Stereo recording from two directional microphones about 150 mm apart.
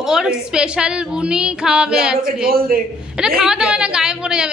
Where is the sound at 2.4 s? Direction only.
80° right.